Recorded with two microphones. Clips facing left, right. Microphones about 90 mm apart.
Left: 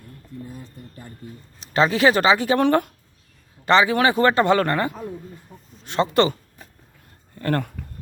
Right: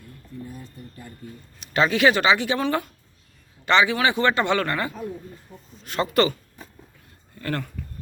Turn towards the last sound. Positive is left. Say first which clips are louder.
# left 5 dB
turn(degrees=40)  # may be behind; listen again after turning